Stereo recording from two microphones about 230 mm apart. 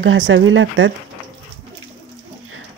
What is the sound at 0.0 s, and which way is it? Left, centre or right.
Speech, right.